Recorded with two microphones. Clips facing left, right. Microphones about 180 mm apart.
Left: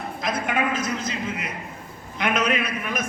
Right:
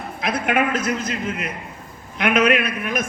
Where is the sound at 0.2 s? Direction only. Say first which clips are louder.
Right 5 dB; 65° right (ahead or behind).